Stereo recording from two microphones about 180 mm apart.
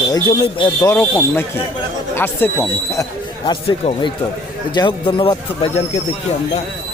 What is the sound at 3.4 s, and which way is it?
Speech, 25° left (ahead or behind).